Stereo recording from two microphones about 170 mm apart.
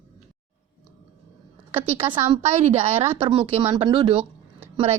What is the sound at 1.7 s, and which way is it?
Speech, 35° right (ahead or behind).